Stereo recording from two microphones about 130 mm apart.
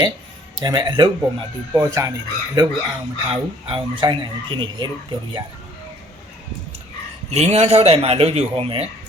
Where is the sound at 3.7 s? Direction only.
40° right (ahead or behind).